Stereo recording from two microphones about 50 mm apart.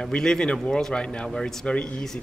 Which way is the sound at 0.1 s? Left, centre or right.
Centre.